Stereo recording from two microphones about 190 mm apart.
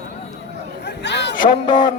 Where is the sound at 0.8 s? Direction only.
65° left (ahead or behind).